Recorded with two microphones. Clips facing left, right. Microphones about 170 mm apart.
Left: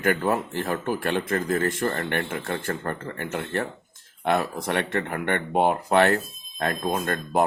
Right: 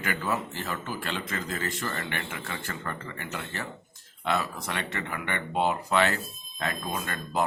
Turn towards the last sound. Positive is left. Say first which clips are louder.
# left 6 dB
turn(degrees=50)  # may be behind; listen again after turning